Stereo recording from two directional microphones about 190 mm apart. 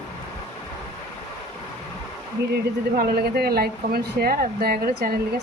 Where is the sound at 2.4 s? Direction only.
60° right (ahead or behind).